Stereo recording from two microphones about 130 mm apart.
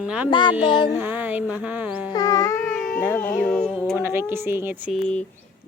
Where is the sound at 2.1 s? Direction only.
30° left (ahead or behind).